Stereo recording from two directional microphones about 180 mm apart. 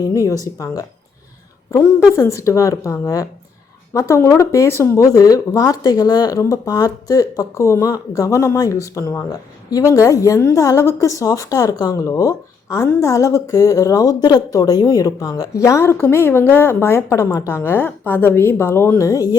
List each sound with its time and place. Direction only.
0.0 s speech: 20° left (ahead or behind)